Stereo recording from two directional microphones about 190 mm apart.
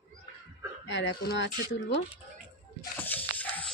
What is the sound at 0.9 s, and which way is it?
Speech, 70° left (ahead or behind).